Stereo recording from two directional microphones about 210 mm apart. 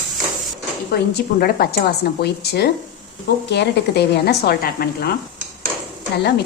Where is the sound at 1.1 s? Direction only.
45° left (ahead or behind).